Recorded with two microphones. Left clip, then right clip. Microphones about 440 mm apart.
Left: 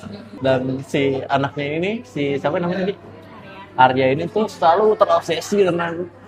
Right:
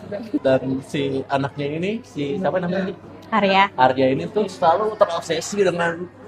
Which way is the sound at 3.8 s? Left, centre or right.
Centre.